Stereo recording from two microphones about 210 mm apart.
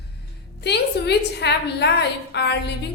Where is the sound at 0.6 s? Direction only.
55° left (ahead or behind).